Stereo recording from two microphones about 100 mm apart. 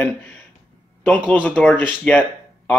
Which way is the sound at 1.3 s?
15° left (ahead or behind).